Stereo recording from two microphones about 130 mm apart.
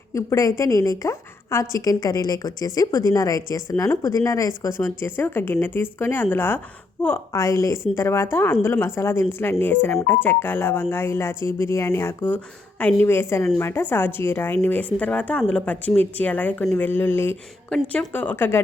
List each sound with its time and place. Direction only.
0.1 s a woman's voice: 25° left (ahead or behind)